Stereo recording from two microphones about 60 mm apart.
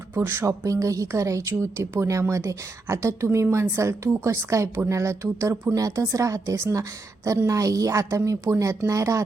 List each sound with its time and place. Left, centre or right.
0.1 s speech: right
0.4 s speech: right
5.7 s speech: right
7.4 s speech: right